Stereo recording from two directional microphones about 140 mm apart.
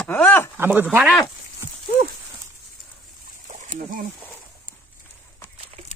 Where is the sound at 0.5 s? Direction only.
15° right (ahead or behind).